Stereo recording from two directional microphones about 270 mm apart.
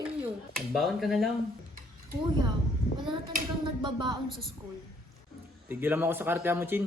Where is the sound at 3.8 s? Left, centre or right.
Centre.